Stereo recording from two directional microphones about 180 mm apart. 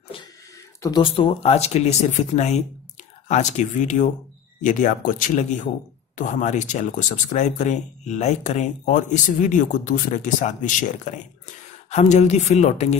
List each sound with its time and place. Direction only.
0.7 s speech: 20° left (ahead or behind); by 12.9 s 40° left (ahead or behind)